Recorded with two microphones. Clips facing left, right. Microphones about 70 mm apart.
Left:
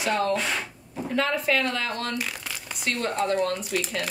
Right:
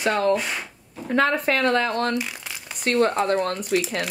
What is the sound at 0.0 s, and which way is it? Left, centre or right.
A woman's voice, right.